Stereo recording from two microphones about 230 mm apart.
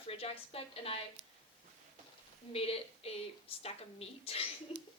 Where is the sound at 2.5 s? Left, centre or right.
Left.